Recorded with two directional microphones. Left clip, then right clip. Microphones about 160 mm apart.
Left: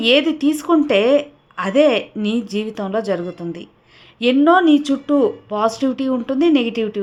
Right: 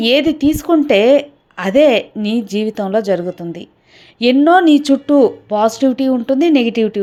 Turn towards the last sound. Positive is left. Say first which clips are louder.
# right 4 dB
turn(degrees=-25)  # may be behind; listen again after turning